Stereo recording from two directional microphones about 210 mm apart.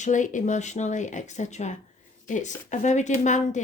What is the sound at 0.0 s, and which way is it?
Speech, 35° left (ahead or behind).